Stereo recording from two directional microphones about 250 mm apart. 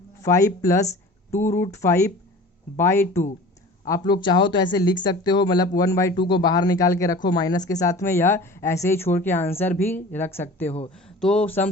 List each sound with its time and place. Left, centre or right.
0.2 s a woman's voice: centre